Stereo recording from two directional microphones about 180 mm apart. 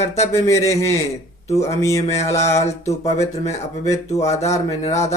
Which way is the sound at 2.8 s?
35° left (ahead or behind).